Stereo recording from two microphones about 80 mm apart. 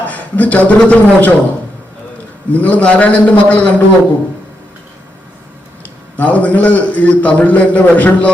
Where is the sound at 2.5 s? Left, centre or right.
Centre.